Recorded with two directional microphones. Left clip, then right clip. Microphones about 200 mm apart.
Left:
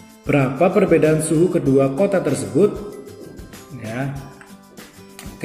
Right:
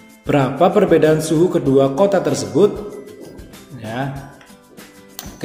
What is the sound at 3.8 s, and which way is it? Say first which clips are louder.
Music: right 3 dB; 5° left (ahead or behind).